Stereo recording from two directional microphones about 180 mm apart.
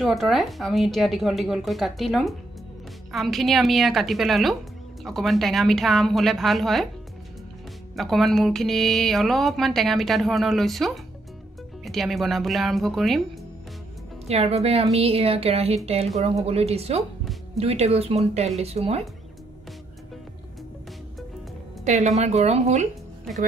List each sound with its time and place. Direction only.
0.0 s speech: centre (ahead or behind)
7.9 s speech: centre (ahead or behind)
14.2 s speech: 35° right (ahead or behind)
21.8 s speech: 40° right (ahead or behind)